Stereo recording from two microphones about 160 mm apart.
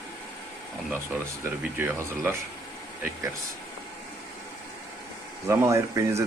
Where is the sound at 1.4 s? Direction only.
15° right (ahead or behind).